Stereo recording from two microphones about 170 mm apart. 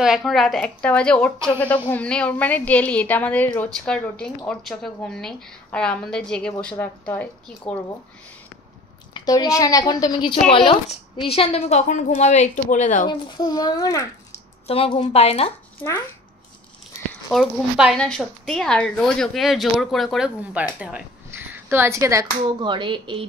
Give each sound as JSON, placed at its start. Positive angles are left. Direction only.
{"t": 0.0, "sound": "a woman's voice", "side_deg": 0}
{"t": 9.1, "sound": "a woman's voice", "side_deg": 20}
{"t": 13.0, "sound": "a woman's voice", "side_deg": 25}
{"t": 14.7, "sound": "a woman's voice", "side_deg": 35}
{"t": 15.8, "sound": "a woman's voice", "side_deg": 15}
{"t": 17.3, "sound": "a woman's voice", "side_deg": 0}